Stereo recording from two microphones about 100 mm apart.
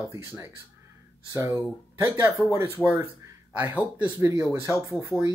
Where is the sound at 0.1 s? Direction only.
30° right (ahead or behind).